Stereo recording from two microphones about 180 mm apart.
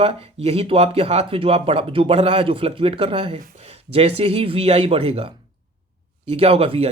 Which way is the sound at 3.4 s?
50° right (ahead or behind).